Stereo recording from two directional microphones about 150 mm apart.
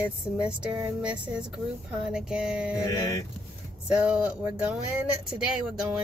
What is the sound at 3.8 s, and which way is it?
Speech, 10° right (ahead or behind).